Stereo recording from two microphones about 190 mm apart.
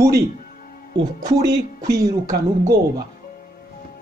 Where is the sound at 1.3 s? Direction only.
20° right (ahead or behind).